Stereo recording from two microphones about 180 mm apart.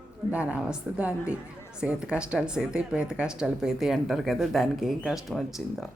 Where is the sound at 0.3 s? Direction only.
5° right (ahead or behind).